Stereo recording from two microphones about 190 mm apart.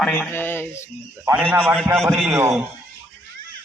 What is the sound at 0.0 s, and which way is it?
Speech, 10° left (ahead or behind).